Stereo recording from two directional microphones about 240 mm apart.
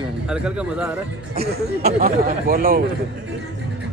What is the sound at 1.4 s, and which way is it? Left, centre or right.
Speech, right.